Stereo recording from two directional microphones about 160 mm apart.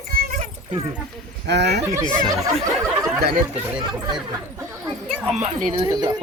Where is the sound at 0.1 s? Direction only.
65° right (ahead or behind).